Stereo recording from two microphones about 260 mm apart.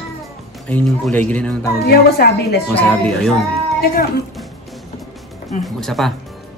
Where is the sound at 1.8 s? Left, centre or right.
Left.